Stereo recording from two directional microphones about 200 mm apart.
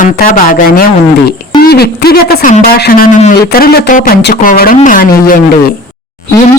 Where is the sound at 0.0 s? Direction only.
40° left (ahead or behind).